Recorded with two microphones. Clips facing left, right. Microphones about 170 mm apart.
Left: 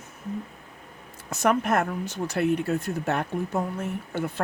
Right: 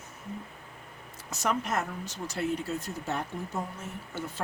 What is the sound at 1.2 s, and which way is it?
Speech, 55° left (ahead or behind).